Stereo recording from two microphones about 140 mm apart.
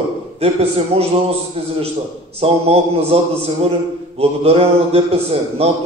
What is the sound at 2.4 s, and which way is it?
A man's voice, 45° right (ahead or behind).